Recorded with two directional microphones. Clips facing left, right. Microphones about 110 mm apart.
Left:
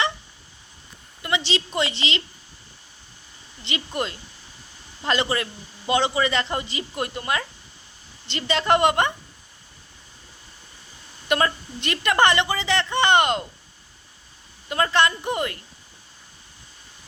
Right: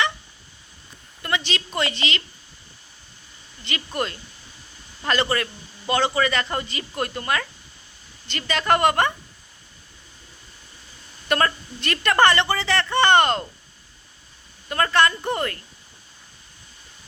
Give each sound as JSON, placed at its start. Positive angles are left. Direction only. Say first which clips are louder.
{"t": 1.5, "sound": "a woman's voice", "louder": "left 1 dB", "side_deg": 20}
{"t": 3.6, "sound": "a woman's voice", "louder": "even", "side_deg": 20}
{"t": 11.3, "sound": "a woman's voice", "louder": "even", "side_deg": 15}
{"t": 14.7, "sound": "a woman's voice", "louder": "right 1 dB", "side_deg": 15}